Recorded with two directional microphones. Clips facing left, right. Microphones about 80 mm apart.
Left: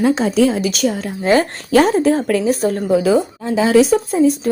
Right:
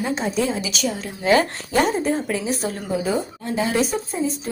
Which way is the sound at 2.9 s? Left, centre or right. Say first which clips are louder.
Left 8 dB; left.